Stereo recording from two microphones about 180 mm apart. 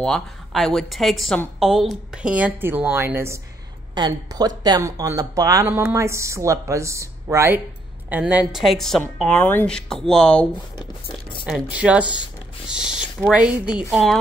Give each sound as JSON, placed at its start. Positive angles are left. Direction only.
{"t": 0.0, "sound": "speech", "side_deg": 0}
{"t": 10.8, "sound": "speech", "side_deg": 25}
{"t": 11.7, "sound": "speech", "side_deg": -5}